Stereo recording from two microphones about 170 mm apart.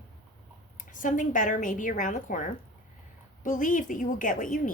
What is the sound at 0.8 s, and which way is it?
Speech, 50° left (ahead or behind).